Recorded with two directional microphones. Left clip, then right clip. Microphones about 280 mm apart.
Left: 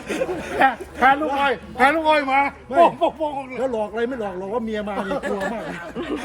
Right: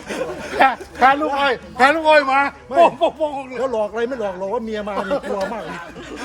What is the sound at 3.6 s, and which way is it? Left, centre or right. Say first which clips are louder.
A man's voice: right 3 dB; centre.